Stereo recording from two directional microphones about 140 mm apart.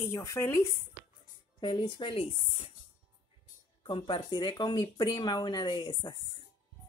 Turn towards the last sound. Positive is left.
turn(degrees=30)  # may be behind; listen again after turning